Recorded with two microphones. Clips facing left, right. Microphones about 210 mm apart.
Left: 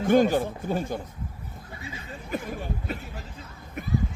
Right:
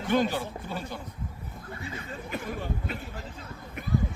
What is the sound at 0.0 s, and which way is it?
Speech, 45° left (ahead or behind).